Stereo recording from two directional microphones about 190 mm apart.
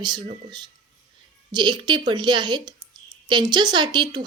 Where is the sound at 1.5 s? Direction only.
25° right (ahead or behind).